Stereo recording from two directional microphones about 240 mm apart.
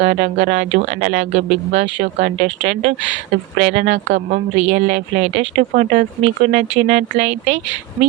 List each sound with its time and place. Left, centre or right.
0.2 s speech: right